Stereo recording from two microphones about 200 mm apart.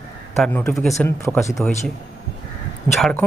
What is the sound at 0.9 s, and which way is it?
Speech, 15° left (ahead or behind).